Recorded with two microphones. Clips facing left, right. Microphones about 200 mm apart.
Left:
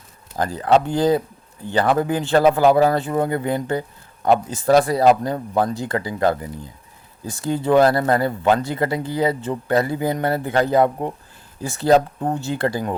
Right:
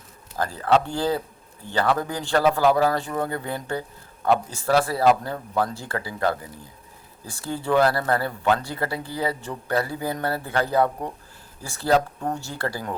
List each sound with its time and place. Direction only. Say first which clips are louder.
0.3 s speech: left 4 dB; 15° left (ahead or behind)
7.4 s speech: left 5 dB; 20° left (ahead or behind)